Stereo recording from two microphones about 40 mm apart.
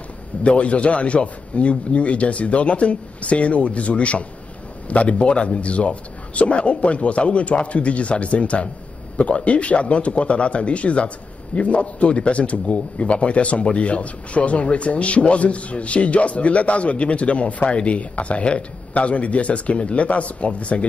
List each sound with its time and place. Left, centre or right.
0.4 s a man's voice: left